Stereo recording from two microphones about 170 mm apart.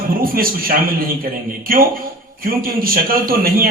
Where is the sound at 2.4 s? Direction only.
60° right (ahead or behind).